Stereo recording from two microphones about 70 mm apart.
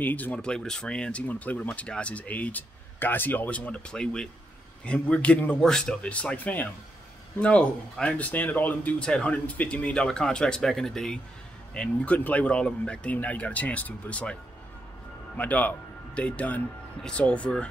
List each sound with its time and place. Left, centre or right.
0.0 s speech: left
0.4 s speech: centre
9.0 s speech: centre
15.3 s speech: left